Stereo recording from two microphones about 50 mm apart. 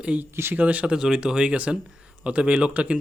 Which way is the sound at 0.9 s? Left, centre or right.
Centre.